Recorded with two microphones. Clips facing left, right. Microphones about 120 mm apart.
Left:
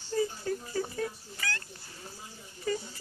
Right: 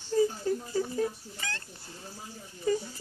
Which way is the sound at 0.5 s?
15° right (ahead or behind).